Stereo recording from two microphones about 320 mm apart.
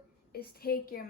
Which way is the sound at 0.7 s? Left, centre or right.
Left.